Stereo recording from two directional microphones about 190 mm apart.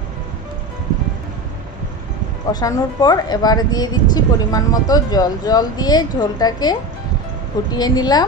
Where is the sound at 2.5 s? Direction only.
20° left (ahead or behind).